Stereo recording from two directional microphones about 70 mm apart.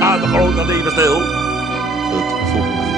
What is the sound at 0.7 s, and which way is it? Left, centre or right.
Music, right.